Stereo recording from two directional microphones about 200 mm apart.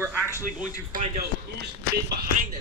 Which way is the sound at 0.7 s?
40° right (ahead or behind).